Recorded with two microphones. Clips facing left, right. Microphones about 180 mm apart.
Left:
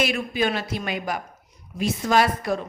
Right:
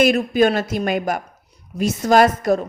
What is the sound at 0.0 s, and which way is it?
A woman's voice, 45° right (ahead or behind).